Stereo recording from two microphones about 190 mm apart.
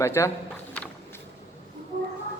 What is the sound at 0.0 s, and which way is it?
Speech, 15° left (ahead or behind).